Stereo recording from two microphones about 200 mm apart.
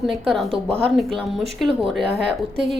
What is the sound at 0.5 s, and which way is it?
Speech, 30° right (ahead or behind).